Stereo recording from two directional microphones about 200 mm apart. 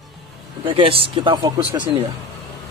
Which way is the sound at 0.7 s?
25° right (ahead or behind).